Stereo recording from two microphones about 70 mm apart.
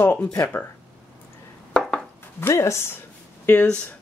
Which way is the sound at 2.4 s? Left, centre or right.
Left.